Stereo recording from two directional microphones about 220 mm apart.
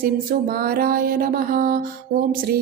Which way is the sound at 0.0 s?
40° right (ahead or behind).